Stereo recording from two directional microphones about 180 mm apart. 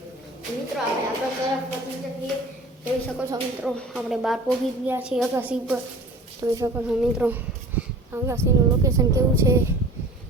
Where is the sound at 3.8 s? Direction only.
Centre (ahead or behind); by 6.8 s 15° right (ahead or behind).